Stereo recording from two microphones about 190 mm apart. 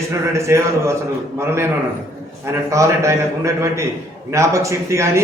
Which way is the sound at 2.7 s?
15° right (ahead or behind).